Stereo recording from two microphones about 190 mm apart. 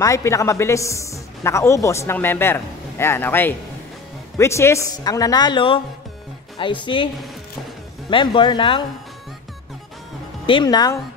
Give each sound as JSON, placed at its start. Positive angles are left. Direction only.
{"t": 0.0, "sound": "a man's voice", "side_deg": 15}
{"t": 8.1, "sound": "a woman's voice", "side_deg": 25}
{"t": 10.4, "sound": "a woman's voice", "side_deg": 25}